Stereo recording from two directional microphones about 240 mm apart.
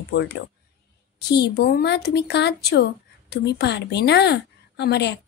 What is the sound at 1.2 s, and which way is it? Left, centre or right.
Speech, left.